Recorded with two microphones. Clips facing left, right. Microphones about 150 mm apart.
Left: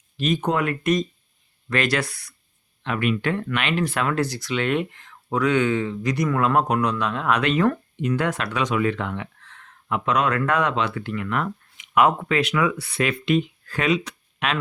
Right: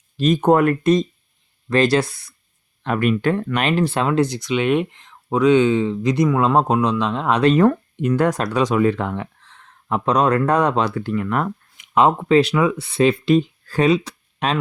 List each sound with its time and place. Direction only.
0.2 s speech: 45° right (ahead or behind)
1.7 s speech: 30° right (ahead or behind)
2.8 s speech: 40° right (ahead or behind)
8.0 s speech: 45° right (ahead or behind)
11.9 s speech: 30° right (ahead or behind)